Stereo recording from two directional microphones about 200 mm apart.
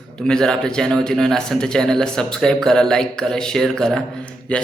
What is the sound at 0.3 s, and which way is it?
Speech, 5° left (ahead or behind).